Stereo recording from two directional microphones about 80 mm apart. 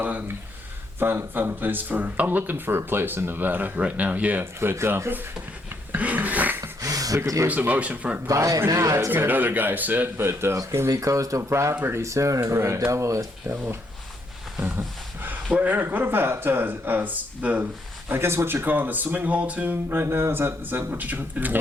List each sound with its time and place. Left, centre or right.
0.0 s a sound: right
0.9 s speech: right
4.7 s speech: right
5.9 s a sound: right
6.6 s a sound: right
7.4 s speech: centre
8.3 s a man's voice: right
9.0 s speech: right
18.1 s speech: right